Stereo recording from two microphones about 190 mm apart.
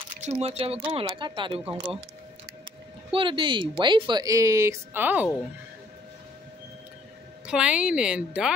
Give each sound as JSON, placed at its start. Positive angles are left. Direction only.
{"t": 0.2, "sound": "speech", "side_deg": -35}
{"t": 3.1, "sound": "speech", "side_deg": -25}
{"t": 7.4, "sound": "speech", "side_deg": -5}